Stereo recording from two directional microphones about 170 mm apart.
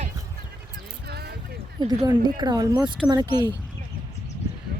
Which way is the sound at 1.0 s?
70° right (ahead or behind).